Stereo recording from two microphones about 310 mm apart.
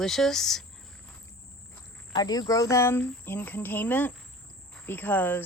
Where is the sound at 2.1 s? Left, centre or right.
Centre.